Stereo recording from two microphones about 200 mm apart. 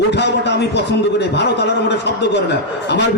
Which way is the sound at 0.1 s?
60° left (ahead or behind).